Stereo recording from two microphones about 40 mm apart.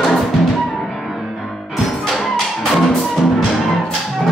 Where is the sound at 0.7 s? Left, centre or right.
Centre.